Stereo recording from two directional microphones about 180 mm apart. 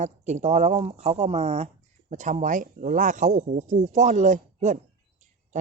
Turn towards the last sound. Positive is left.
turn(degrees=-40)  # may be behind; listen again after turning